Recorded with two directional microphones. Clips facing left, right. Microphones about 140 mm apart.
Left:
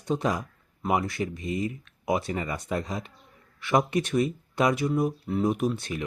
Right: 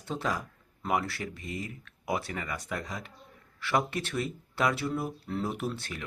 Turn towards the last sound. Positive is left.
turn(degrees=15)  # may be behind; listen again after turning